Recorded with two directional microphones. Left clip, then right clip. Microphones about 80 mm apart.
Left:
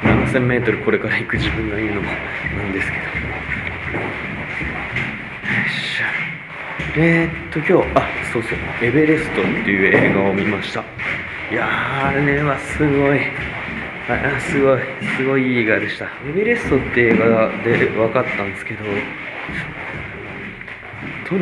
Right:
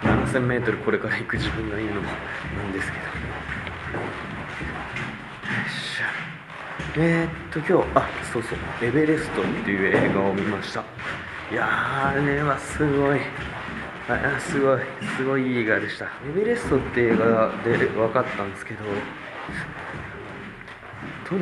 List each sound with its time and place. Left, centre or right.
0.0 s speech: centre
5.7 s speech: centre